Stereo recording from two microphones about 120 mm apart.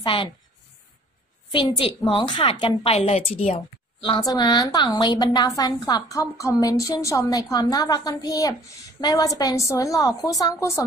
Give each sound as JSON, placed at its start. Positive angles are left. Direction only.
{"t": 0.0, "sound": "a woman's voice", "side_deg": 45}
{"t": 1.5, "sound": "a woman's voice", "side_deg": 45}
{"t": 4.2, "sound": "a woman's voice", "side_deg": 30}